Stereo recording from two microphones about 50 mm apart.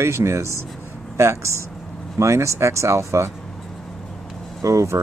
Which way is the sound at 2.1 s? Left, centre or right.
Right.